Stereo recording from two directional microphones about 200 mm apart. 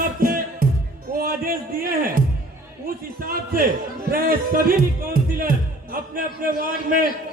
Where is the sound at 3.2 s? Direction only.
45° right (ahead or behind).